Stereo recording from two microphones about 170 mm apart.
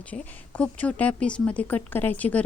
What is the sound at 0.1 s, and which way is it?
Speech, 10° left (ahead or behind).